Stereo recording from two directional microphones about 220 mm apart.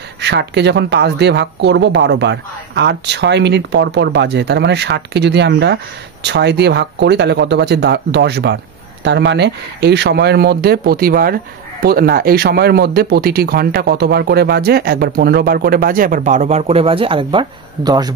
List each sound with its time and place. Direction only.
0.2 s speech: 50° right (ahead or behind); by 18.1 s 20° right (ahead or behind)